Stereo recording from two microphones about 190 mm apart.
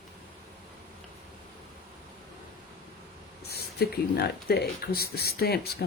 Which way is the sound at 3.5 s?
55° left (ahead or behind).